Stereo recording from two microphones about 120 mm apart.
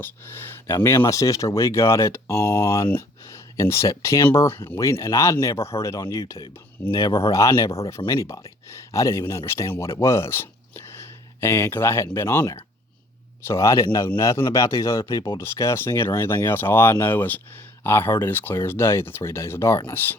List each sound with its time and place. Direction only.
0.0 s speech: 20° left (ahead or behind)